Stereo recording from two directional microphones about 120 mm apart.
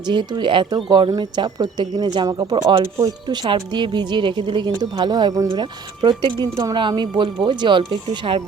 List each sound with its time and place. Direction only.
0.1 s a woman's voice: 40° right (ahead or behind)